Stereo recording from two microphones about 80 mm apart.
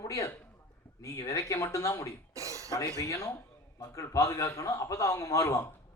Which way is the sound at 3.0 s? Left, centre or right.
Left.